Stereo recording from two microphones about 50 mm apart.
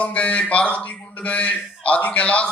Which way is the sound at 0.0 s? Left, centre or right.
Left.